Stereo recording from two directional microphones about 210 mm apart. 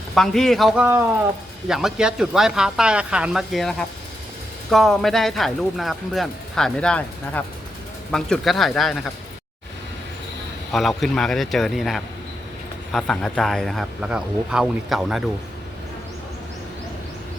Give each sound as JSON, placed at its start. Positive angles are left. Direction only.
{"t": 0.1, "sound": "speech", "side_deg": 0}
{"t": 0.9, "sound": "speech", "side_deg": -10}
{"t": 10.7, "sound": "speech", "side_deg": 0}